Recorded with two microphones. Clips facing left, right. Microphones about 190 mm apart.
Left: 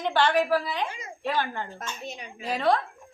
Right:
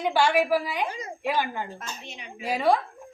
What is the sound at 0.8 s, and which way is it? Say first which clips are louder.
Speech: right 4 dB; 35° right (ahead or behind).